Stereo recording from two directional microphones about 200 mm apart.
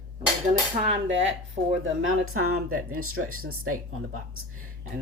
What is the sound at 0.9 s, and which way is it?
Speech, 65° right (ahead or behind).